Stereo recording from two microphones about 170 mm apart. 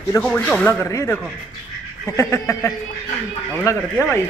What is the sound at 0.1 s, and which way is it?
Speech, 10° left (ahead or behind).